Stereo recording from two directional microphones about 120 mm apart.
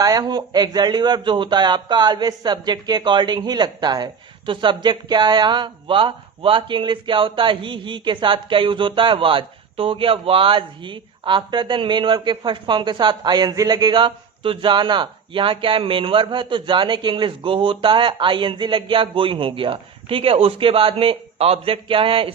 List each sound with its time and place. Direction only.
0.0 s speech: 35° right (ahead or behind)